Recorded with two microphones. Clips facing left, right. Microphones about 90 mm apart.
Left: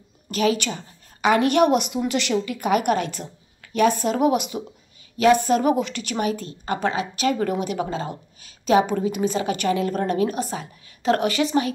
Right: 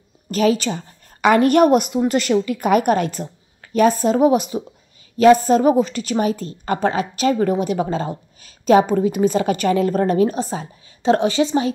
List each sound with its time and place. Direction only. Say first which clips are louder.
0.3 s a woman's voice: right 4 dB; 35° right (ahead or behind)